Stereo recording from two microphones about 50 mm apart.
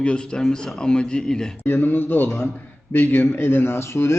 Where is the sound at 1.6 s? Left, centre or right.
Left.